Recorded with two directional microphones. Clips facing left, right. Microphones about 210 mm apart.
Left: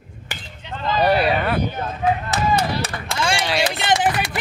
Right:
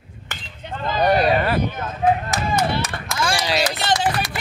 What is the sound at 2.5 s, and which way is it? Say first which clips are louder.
Clapping: even; 35° left (ahead or behind).